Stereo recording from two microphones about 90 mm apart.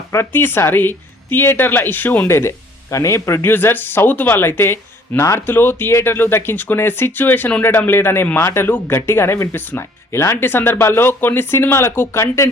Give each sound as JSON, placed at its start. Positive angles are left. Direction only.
{"t": 0.1, "sound": "speech", "side_deg": 25}